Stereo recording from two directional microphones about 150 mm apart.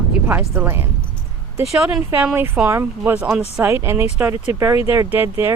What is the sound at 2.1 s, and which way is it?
Speech, 15° right (ahead or behind).